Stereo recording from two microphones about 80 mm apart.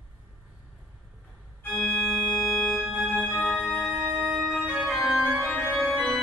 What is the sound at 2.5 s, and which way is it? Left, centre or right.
Music, centre.